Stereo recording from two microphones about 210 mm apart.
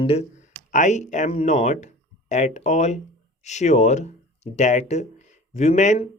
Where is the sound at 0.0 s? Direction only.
30° left (ahead or behind).